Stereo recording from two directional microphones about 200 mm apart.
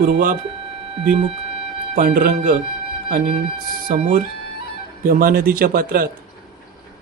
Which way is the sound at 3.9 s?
40° right (ahead or behind).